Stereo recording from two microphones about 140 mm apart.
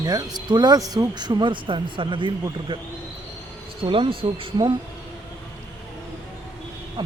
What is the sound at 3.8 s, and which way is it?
Speech, 40° right (ahead or behind).